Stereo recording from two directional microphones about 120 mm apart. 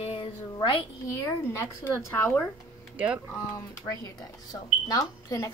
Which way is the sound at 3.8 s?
30° left (ahead or behind).